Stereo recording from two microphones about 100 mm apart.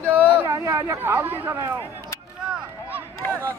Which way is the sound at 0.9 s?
20° right (ahead or behind).